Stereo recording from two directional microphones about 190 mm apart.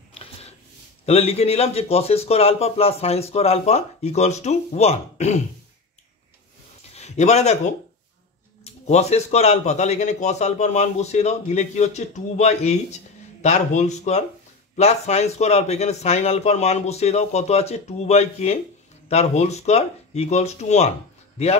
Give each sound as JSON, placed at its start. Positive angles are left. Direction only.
{"t": 0.1, "sound": "a sound", "side_deg": 30}
{"t": 1.0, "sound": "a man's voice", "side_deg": 35}
{"t": 6.9, "sound": "speech", "side_deg": 35}
{"t": 8.8, "sound": "a man's voice", "side_deg": 35}